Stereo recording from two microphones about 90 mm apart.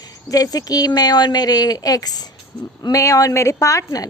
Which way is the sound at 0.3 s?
45° left (ahead or behind).